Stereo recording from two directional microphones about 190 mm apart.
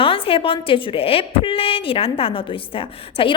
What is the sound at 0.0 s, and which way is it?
A woman's voice, 30° left (ahead or behind).